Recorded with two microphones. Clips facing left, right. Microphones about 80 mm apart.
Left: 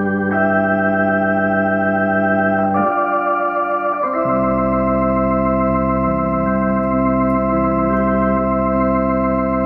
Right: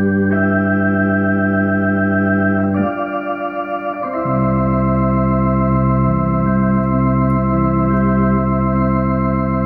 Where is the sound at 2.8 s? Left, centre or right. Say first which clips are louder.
Left 3 dB; left.